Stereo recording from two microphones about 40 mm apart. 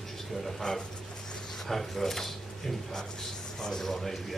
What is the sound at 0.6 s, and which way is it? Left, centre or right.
A man's voice, centre.